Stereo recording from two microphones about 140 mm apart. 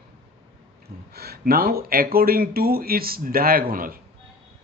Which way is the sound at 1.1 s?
90° right.